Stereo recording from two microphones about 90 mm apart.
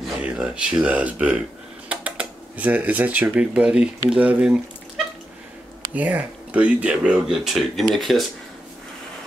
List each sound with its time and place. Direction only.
0.2 s speech: 10° right (ahead or behind)
5.9 s speech: 15° right (ahead or behind); by 8.3 s centre (ahead or behind)